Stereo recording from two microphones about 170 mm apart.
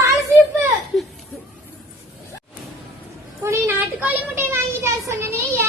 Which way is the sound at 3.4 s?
15° right (ahead or behind).